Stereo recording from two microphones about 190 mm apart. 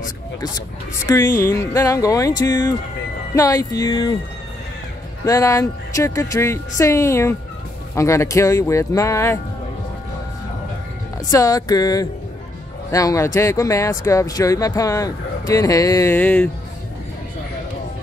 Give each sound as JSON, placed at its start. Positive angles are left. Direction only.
{"t": 1.0, "sound": "speech", "side_deg": 20}
{"t": 5.2, "sound": "speech", "side_deg": 15}
{"t": 11.2, "sound": "speech", "side_deg": 20}